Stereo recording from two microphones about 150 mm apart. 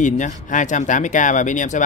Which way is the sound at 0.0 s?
55° left (ahead or behind).